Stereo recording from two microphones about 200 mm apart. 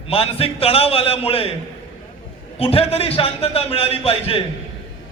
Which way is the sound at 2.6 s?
30° left (ahead or behind).